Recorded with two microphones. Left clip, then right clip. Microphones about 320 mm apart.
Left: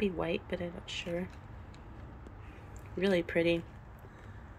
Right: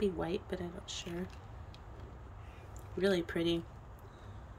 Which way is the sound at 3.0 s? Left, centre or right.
Centre.